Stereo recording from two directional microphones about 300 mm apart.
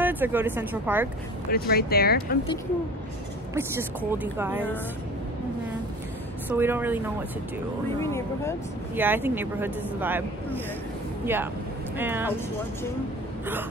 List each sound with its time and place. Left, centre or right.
0.0 s speech: centre
1.5 s speech: left
3.5 s speech: centre
6.5 s speech: centre
8.0 s speech: centre
8.9 s speech: centre
12.0 s speech: centre